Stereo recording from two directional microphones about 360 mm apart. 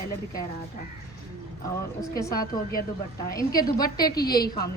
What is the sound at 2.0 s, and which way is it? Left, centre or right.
A woman's voice, centre.